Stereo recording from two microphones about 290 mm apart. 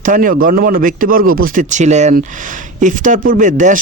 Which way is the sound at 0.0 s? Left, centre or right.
Right.